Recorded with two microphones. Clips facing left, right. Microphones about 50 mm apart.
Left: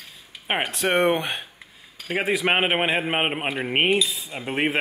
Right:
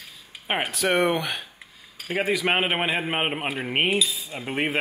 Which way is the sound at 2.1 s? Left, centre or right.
Centre.